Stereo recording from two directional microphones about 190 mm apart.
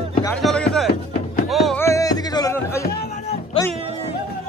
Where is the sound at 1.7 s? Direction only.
15° left (ahead or behind).